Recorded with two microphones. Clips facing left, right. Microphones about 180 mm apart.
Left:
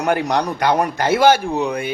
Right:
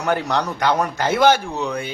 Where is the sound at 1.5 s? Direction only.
55° left (ahead or behind).